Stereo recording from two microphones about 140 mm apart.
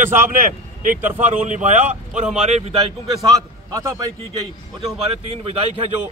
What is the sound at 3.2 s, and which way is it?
A man's voice, 25° right (ahead or behind).